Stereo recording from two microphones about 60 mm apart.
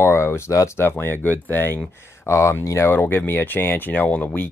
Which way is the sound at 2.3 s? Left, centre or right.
Left.